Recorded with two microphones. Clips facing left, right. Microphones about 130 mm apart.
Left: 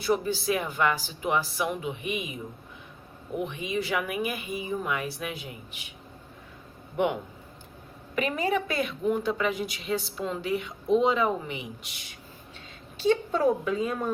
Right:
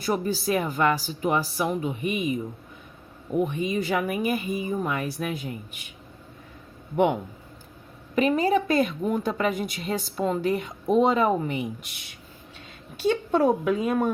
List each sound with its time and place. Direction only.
0.0 s speech: 45° right (ahead or behind)
3.3 s a woman's voice: 45° right (ahead or behind)
6.9 s a woman's voice: 50° right (ahead or behind)
8.1 s a woman's voice: 35° right (ahead or behind); by 12.0 s 55° right (ahead or behind)
13.3 s speech: 65° right (ahead or behind)